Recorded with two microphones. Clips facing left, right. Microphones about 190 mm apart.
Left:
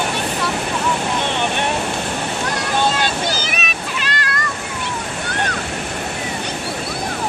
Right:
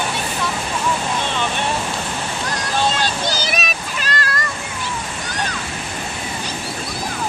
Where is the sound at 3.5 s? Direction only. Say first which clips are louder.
Right 1 dB; 40° right (ahead or behind).